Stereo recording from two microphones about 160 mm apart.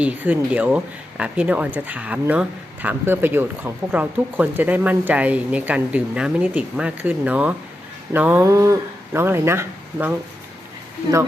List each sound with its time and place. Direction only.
0.0 s speech: 10° right (ahead or behind)